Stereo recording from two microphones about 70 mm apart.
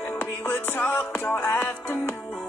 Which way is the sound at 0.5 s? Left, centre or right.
Left.